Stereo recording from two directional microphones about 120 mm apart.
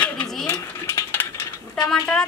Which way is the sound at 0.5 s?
20° left (ahead or behind).